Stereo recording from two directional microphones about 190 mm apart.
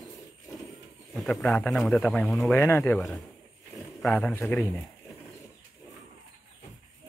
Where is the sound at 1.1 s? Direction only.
5° left (ahead or behind).